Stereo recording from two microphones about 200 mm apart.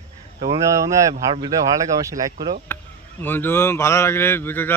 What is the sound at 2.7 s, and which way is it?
Speech, 10° left (ahead or behind).